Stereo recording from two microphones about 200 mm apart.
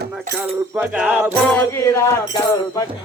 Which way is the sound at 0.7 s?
10° right (ahead or behind).